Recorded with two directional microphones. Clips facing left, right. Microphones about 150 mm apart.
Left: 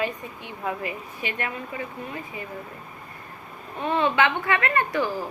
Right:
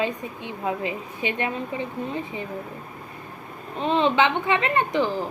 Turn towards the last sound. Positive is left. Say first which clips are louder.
# right 2 dB
turn(degrees=-20)  # may be behind; listen again after turning